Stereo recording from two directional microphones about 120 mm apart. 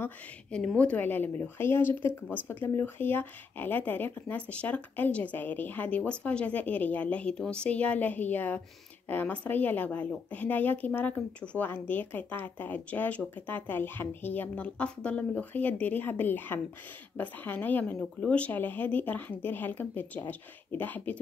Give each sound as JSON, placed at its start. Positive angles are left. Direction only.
{"t": 0.0, "sound": "speech", "side_deg": 10}